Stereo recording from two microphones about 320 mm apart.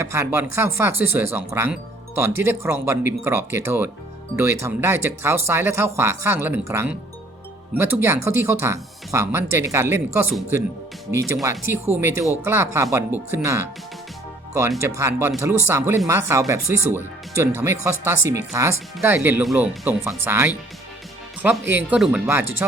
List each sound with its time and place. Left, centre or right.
0.0 s speech: centre
21.7 s speech: centre